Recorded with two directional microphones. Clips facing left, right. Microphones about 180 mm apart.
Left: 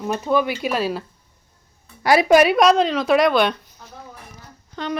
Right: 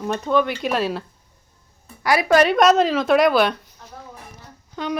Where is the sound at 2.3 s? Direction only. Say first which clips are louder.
Left 1 dB; 10° left (ahead or behind).